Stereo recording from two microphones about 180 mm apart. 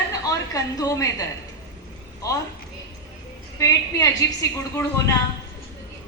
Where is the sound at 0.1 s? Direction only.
20° left (ahead or behind).